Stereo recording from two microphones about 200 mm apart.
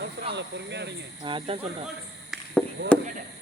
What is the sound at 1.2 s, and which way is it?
Speech, 25° right (ahead or behind).